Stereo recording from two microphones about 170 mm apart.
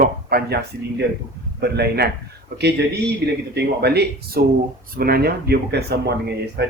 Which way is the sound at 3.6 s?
75° right (ahead or behind).